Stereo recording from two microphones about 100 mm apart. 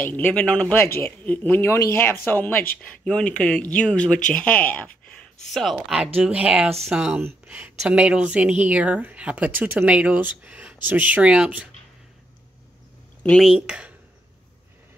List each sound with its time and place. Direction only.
0.0 s speech: 20° left (ahead or behind)
5.5 s speech: centre (ahead or behind)
6.1 s speech: 15° right (ahead or behind)
7.2 s speech: 20° right (ahead or behind)
13.6 s speech: 15° right (ahead or behind)